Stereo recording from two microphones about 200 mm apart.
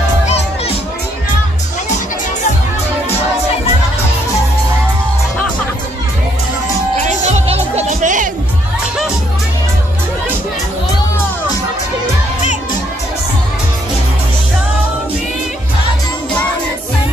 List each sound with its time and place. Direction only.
7.1 s music: 35° right (ahead or behind)